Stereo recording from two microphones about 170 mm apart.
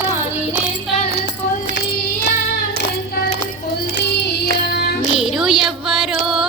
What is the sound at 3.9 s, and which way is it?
Music, 80° left.